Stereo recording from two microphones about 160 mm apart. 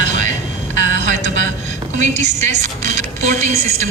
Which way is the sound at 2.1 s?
45° right (ahead or behind).